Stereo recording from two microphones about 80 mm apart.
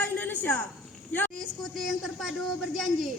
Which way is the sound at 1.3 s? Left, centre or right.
Centre.